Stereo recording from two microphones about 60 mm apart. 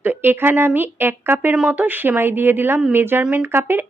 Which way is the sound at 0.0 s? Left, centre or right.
Right.